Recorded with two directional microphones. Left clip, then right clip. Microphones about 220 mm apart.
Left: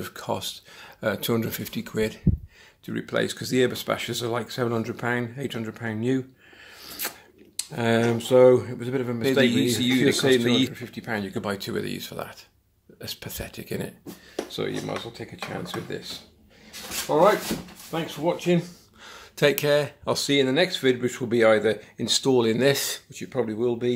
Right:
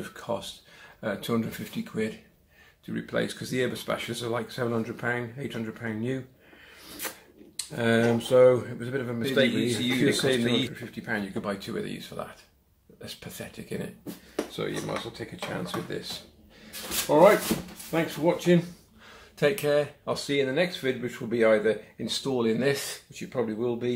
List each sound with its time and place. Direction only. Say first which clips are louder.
0.0 s speech: left 3 dB; 40° left (ahead or behind)
14.5 s speech: left 4 dB; 35° left (ahead or behind)
17.1 s speech: right 1 dB; 20° left (ahead or behind)
19.0 s speech: left 4 dB; 50° left (ahead or behind)